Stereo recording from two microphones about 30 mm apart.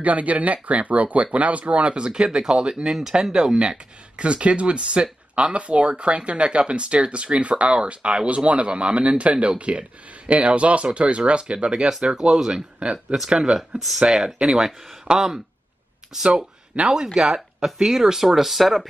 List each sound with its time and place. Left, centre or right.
0.0 s speech: right
2.0 s speech: right
2.9 s speech: centre
13.6 s speech: centre
14.1 s speech: centre